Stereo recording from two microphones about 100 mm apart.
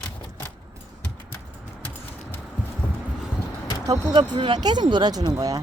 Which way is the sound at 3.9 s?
50° right (ahead or behind).